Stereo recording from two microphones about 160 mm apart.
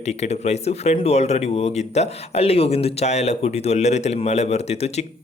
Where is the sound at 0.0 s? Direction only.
45° left (ahead or behind).